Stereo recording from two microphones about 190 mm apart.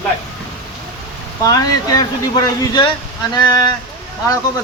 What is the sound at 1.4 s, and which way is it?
Speech, 20° left (ahead or behind).